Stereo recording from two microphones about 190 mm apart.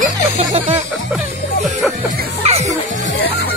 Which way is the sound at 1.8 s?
Centre (ahead or behind).